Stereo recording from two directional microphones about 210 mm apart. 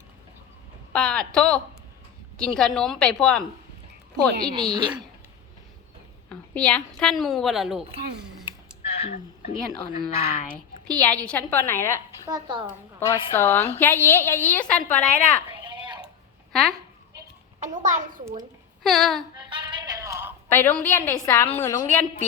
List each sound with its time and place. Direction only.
0.9 s a woman's voice: 5° left (ahead or behind)
4.4 s speech: 20° right (ahead or behind)
6.2 s a woman's voice: 5° left (ahead or behind)
9.6 s a woman's voice: centre (ahead or behind)
12.2 s speech: 20° right (ahead or behind)
13.1 s a woman's voice: 15° left (ahead or behind)
15.6 s a sound: 20° right (ahead or behind)
16.5 s speech: centre (ahead or behind)
17.6 s a child's voice: 35° right (ahead or behind)
18.8 s speech: centre (ahead or behind)
19.5 s music: 20° right (ahead or behind)
20.5 s a woman's voice: 10° left (ahead or behind)